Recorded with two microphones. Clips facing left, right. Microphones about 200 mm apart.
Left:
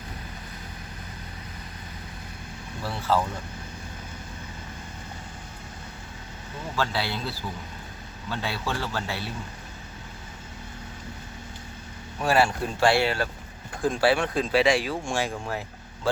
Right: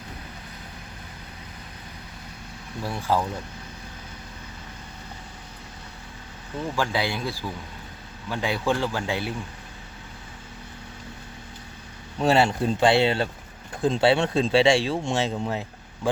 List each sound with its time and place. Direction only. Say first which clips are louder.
2.8 s a man's voice: right 1 dB; 15° right (ahead or behind)
6.7 s a man's voice: right 1 dB; 15° right (ahead or behind)
12.2 s speech: right 3 dB; 25° right (ahead or behind)